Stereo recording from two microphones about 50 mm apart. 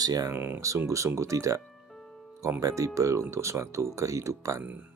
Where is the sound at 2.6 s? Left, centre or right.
Right.